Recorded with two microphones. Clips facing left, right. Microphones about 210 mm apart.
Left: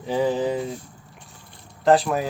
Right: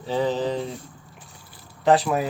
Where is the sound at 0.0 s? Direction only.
15° left (ahead or behind).